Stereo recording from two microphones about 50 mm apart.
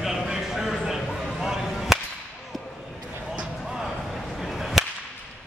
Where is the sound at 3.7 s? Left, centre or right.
Centre.